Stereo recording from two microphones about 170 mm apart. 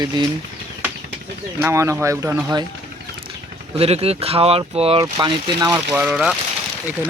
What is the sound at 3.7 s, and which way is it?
Speech, 35° right (ahead or behind).